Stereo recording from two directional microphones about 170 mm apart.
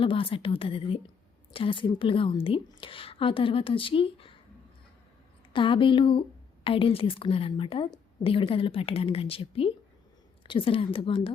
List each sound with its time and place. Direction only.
0.0 s a woman's voice: 30° left (ahead or behind)
5.5 s a woman's voice: 30° left (ahead or behind)